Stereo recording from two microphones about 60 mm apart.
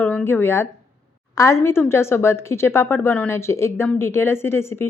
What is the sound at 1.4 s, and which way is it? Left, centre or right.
Speech, left.